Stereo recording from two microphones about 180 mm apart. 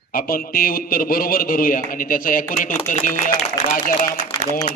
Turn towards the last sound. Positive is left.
turn(degrees=45)  # may be behind; listen again after turning